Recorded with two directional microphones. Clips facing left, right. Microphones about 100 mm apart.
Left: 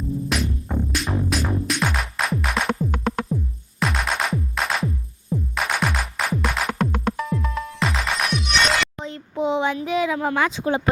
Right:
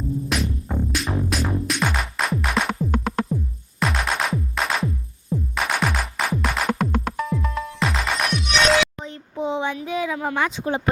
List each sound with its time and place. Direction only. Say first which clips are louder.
0.3 s music: even; centre (ahead or behind)
9.0 s a sound: left 3 dB; 90° left
10.4 s speech: left 2 dB; 90° left